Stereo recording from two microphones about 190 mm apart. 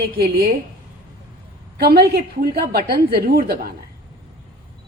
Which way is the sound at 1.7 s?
55° right (ahead or behind).